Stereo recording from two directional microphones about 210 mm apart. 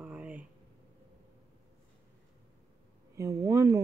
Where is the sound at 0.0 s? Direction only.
5° right (ahead or behind).